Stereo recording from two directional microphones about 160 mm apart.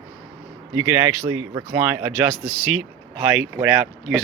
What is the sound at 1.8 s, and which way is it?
Speech, 10° right (ahead or behind).